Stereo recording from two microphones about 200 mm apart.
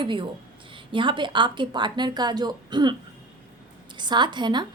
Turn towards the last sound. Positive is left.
turn(degrees=-20)  # may be behind; listen again after turning